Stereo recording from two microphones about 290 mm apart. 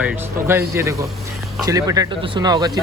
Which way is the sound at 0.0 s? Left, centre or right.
Centre.